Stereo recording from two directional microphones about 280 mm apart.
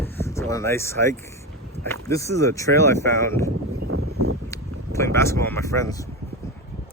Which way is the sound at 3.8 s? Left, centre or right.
Right.